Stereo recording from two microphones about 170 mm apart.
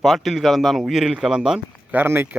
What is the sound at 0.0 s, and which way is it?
Speech, centre (ahead or behind).